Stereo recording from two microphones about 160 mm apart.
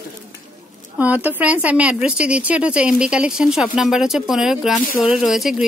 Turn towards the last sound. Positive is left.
turn(degrees=0)  # may be behind; listen again after turning